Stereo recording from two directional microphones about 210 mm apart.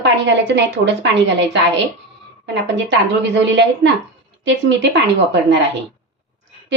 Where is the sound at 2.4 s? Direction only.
55° right (ahead or behind).